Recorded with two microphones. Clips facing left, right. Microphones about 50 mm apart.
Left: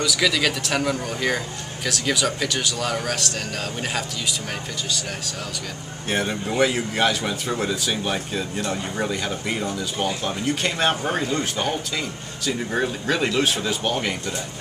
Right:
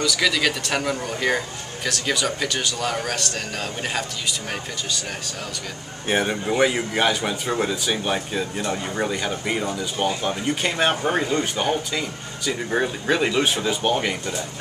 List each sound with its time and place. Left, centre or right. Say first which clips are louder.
0.0 s speech: even; centre
6.0 s speech: right 3 dB; centre